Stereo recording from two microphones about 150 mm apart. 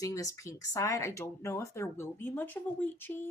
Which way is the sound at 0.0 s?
20° left (ahead or behind).